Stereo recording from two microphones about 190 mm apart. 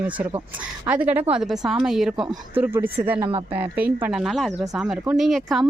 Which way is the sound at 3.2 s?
25° right (ahead or behind).